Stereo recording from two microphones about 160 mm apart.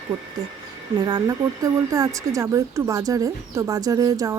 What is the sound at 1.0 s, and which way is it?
Speech, 25° right (ahead or behind).